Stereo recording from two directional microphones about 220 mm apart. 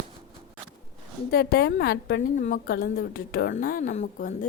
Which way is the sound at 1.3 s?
45° left (ahead or behind).